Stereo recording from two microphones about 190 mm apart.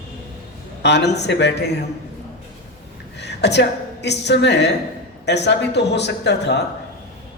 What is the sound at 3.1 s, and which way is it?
A woman's voice, 65° left (ahead or behind).